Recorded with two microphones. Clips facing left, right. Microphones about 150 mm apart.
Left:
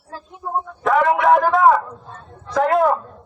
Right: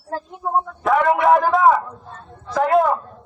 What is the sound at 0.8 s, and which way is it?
Speech, centre (ahead or behind).